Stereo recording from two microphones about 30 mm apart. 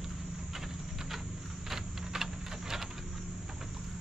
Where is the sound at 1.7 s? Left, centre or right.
Centre.